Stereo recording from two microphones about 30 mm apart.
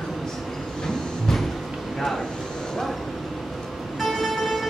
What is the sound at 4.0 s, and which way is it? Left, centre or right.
Vehicle, centre.